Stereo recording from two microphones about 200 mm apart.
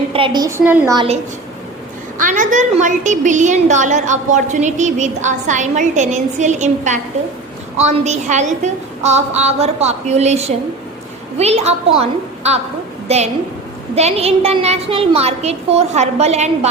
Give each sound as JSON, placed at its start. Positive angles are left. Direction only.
{"t": 0.1, "sound": "a woman's voice", "side_deg": -25}
{"t": 0.9, "sound": "a woman's voice", "side_deg": -30}